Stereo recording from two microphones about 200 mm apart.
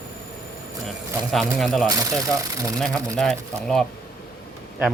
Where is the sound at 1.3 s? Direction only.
Centre (ahead or behind).